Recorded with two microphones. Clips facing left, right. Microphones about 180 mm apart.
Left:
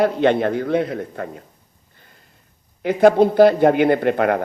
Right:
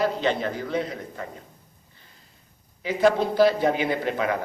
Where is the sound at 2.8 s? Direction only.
55° left (ahead or behind).